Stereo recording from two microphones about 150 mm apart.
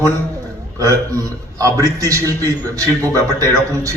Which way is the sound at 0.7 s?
20° right (ahead or behind).